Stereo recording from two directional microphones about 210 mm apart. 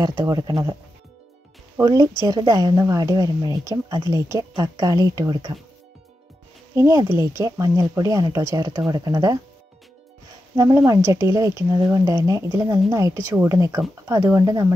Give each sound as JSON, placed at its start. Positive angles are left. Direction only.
{"t": 0.0, "sound": "speech", "side_deg": -15}
{"t": 1.8, "sound": "speech", "side_deg": -15}
{"t": 6.7, "sound": "speech", "side_deg": -15}
{"t": 10.5, "sound": "speech", "side_deg": -15}